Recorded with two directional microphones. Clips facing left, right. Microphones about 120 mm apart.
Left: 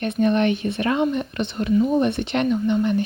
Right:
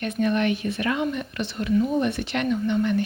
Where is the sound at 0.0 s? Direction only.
30° left (ahead or behind).